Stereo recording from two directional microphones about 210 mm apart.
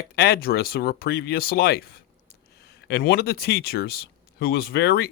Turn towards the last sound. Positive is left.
turn(degrees=50)  # may be behind; listen again after turning